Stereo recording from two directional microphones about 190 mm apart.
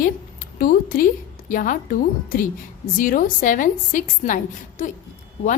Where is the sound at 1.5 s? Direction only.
45° left (ahead or behind).